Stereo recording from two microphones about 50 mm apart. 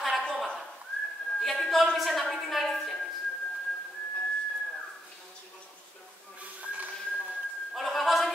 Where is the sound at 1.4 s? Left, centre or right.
Centre.